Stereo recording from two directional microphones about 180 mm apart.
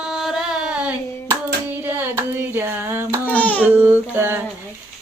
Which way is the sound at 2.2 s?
10° right (ahead or behind).